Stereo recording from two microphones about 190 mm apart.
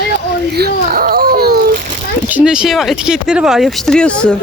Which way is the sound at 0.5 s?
55° right (ahead or behind).